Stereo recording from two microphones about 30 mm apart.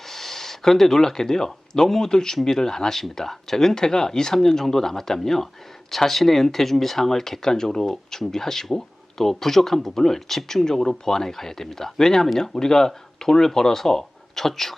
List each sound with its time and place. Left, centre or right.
0.1 s gasp: centre
1.9 s speech: centre
3.8 s speech: left
4.4 s speech: centre